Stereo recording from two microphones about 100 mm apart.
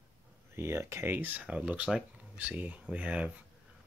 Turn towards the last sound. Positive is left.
turn(degrees=-10)  # may be behind; listen again after turning